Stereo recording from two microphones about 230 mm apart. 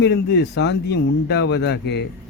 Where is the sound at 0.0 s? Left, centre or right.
Left.